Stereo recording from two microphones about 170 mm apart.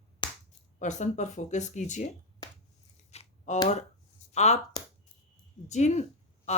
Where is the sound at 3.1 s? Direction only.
40° left (ahead or behind).